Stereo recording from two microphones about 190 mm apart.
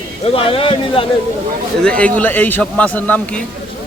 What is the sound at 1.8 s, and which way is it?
Speech, 5° left (ahead or behind).